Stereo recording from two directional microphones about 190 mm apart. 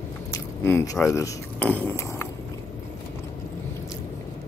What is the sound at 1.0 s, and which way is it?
Speech, 15° left (ahead or behind).